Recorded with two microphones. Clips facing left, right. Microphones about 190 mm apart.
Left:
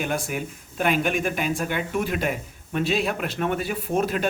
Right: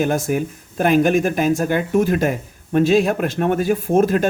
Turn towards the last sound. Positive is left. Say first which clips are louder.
# right 8 dB
turn(degrees=-45)  # may be behind; listen again after turning